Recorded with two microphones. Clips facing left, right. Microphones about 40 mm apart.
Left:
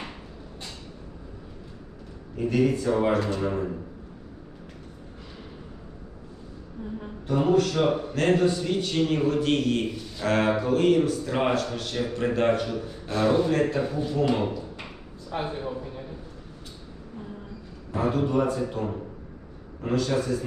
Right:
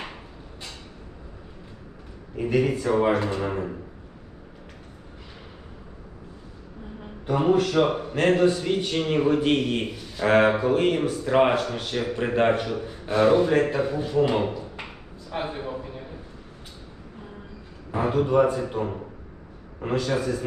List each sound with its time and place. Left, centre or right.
2.3 s a man's voice: centre
7.3 s a man's voice: right
18.1 s a man's voice: centre